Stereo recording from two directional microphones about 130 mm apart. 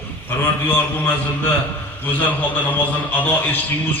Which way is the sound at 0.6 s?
15° left (ahead or behind).